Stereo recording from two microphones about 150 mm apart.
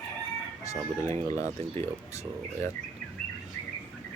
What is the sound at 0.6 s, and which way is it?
Speech, 20° left (ahead or behind).